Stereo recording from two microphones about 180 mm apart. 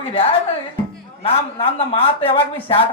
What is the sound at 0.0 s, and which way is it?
Speech, 30° left (ahead or behind).